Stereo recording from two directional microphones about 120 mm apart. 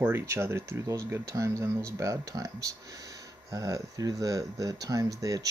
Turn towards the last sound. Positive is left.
turn(degrees=-30)  # may be behind; listen again after turning